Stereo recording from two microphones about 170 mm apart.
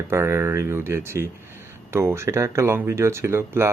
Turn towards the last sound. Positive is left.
turn(degrees=-15)  # may be behind; listen again after turning